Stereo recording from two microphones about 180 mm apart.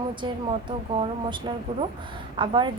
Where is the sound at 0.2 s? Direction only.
25° right (ahead or behind).